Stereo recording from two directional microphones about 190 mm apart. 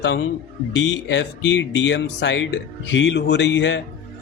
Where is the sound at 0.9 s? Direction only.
75° left (ahead or behind).